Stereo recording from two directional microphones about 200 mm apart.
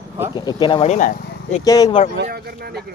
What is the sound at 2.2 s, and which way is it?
Speech, 50° right (ahead or behind).